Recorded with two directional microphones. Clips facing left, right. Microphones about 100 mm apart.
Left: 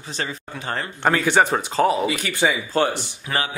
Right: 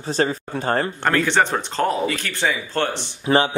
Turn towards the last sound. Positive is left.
turn(degrees=-30)  # may be behind; listen again after turning